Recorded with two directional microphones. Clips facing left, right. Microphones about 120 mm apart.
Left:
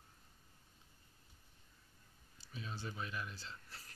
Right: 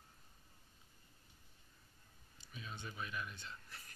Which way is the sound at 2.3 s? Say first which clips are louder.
Left 3 dB; 30° left (ahead or behind).